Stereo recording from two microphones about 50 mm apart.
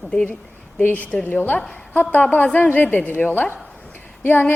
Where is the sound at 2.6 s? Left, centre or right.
Left.